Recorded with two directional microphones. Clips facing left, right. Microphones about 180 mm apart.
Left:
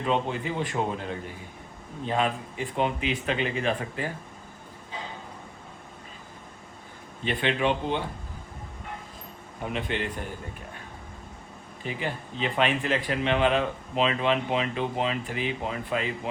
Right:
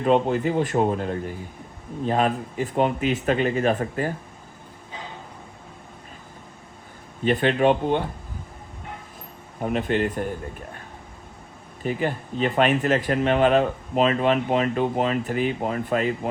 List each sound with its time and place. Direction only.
0.0 s speech: 45° right (ahead or behind)
2.0 s speech: 45° right (ahead or behind)
7.3 s speech: 45° right (ahead or behind)
9.6 s speech: 45° right (ahead or behind)
11.8 s speech: 45° right (ahead or behind)